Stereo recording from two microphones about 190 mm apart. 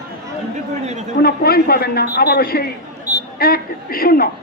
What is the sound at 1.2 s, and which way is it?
A man's voice, 55° left (ahead or behind).